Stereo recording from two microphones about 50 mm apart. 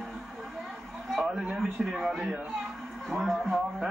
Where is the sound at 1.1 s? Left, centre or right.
Centre.